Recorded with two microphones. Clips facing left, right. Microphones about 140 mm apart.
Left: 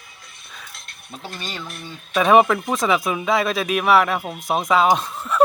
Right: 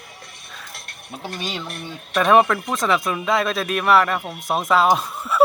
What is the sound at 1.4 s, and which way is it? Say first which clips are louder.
Speech: right 4 dB; 15° right (ahead or behind).